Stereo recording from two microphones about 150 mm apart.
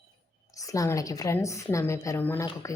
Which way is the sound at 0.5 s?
20° left (ahead or behind).